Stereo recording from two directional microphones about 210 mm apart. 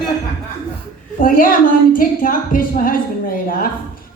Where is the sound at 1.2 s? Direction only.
40° left (ahead or behind).